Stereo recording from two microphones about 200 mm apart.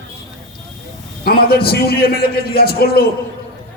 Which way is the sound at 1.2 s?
50° left (ahead or behind).